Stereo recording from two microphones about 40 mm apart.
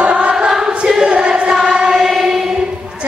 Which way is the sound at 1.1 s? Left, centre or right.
Right.